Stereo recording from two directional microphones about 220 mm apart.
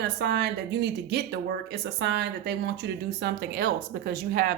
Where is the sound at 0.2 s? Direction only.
50° right (ahead or behind).